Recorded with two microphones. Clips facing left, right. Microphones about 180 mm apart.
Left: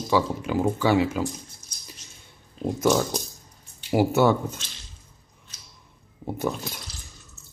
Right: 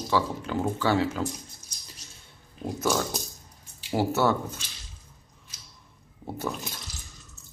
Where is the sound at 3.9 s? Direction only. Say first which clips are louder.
Left 5 dB; 15° left (ahead or behind).